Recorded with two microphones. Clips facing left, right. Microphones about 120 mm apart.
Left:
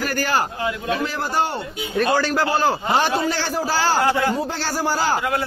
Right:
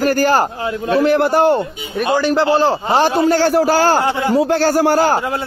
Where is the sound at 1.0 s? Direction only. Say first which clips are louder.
Right 10 dB; 65° right (ahead or behind).